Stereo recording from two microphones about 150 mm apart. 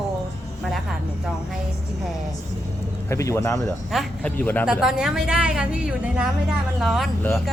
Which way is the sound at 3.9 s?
Centre (ahead or behind).